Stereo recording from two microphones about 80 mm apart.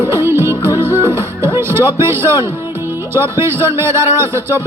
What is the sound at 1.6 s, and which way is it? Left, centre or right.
Speech, right.